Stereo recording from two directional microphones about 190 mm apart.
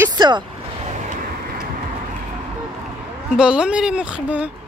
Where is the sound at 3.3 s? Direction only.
5° right (ahead or behind).